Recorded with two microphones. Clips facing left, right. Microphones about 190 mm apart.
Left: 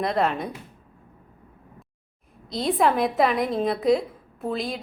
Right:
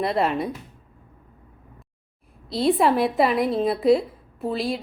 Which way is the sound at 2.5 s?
5° right (ahead or behind).